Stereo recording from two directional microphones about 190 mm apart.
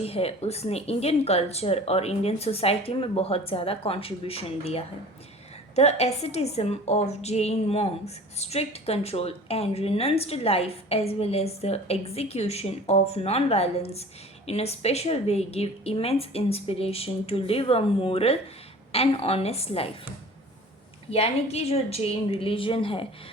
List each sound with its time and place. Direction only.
0.0 s a woman's voice: 30° left (ahead or behind)
21.1 s a woman's voice: 30° left (ahead or behind)